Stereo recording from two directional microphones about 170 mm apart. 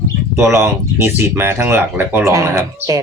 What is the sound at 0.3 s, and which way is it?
Speech, 15° right (ahead or behind).